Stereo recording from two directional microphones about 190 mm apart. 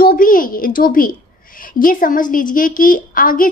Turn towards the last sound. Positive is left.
turn(degrees=45)  # may be behind; listen again after turning